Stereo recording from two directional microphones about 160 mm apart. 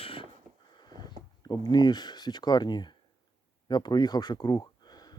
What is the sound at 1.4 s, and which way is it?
Speech, 25° left (ahead or behind).